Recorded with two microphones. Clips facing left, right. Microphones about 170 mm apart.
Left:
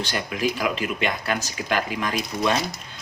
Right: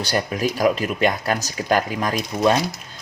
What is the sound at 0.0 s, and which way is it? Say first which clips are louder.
Speech: right 3 dB; 40° right (ahead or behind).